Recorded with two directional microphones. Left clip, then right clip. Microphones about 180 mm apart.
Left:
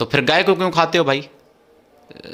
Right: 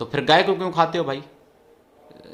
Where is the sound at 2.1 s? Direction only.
20° left (ahead or behind).